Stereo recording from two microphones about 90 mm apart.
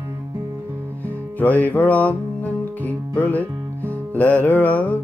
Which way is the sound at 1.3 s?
20° left (ahead or behind).